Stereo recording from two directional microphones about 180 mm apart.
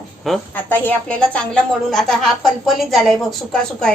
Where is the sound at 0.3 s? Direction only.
10° left (ahead or behind).